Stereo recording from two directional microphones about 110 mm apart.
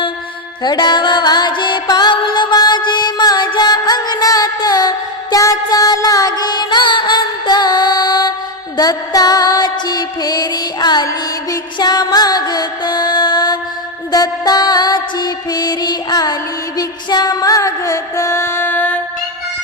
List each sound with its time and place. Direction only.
0.6 s music: 40° left (ahead or behind); by 18.9 s 15° left (ahead or behind)